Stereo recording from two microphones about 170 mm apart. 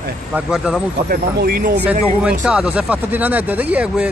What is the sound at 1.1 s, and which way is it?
Speech, 60° right (ahead or behind).